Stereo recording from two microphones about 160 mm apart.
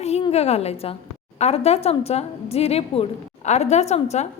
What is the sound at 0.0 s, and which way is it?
A woman's voice, 40° left (ahead or behind).